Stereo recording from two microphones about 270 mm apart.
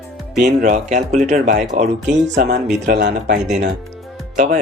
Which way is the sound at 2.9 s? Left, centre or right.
Right.